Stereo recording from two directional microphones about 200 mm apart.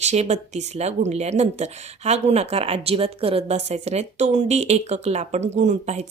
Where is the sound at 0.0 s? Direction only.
35° right (ahead or behind).